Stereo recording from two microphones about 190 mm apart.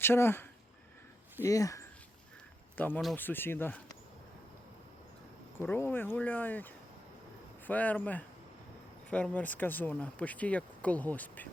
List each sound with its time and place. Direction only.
0.0 s speech: 10° left (ahead or behind)
5.5 s speech: 10° left (ahead or behind)
7.7 s speech: 10° left (ahead or behind)